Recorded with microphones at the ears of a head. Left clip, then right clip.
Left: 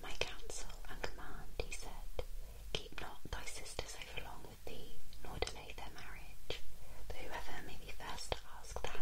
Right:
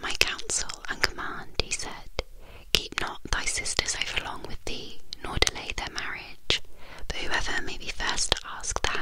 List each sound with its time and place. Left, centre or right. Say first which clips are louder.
0.0 s whispering: right 17 dB; right